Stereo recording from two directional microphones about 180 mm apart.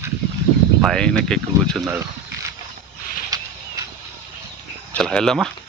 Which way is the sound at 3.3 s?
20° right (ahead or behind).